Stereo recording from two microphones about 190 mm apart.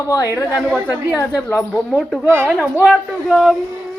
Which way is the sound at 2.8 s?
Centre (ahead or behind).